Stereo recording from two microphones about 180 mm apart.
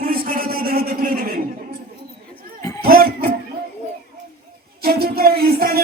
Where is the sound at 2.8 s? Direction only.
55° right (ahead or behind).